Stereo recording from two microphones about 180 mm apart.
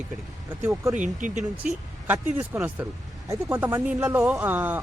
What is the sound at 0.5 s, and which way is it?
Speech, 15° right (ahead or behind).